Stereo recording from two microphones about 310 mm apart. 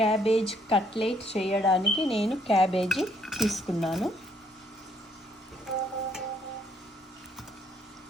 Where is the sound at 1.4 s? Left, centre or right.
Centre.